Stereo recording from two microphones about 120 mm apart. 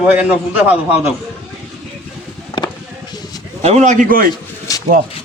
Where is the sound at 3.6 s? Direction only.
80° right.